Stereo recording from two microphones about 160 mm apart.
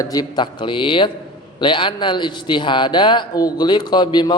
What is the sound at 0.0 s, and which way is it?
A man's voice, 25° left (ahead or behind).